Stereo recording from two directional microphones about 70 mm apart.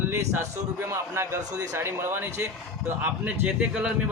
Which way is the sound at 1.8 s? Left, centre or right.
Right.